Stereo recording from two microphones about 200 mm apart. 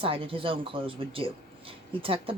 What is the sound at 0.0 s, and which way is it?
Speech, 25° right (ahead or behind).